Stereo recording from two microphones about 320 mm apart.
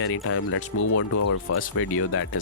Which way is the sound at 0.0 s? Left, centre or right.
Left.